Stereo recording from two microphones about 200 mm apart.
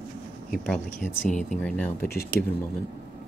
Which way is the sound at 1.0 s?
35° left (ahead or behind).